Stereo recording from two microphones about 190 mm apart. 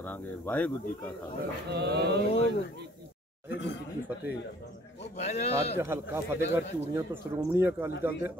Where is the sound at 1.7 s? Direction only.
55° right (ahead or behind).